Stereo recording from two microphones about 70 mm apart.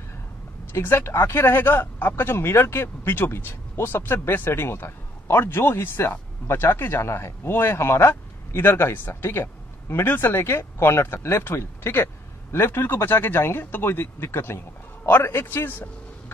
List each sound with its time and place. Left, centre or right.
0.7 s speech: left